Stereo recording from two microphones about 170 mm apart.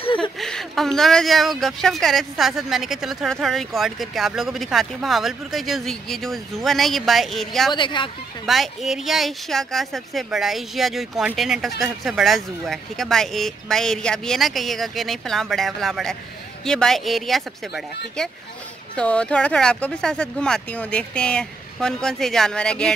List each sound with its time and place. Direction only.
0.0 s a sound: 30° left (ahead or behind)
0.4 s speech: centre (ahead or behind)
7.7 s speech: 30° left (ahead or behind)
8.5 s speech: centre (ahead or behind)
18.9 s speech: 5° left (ahead or behind)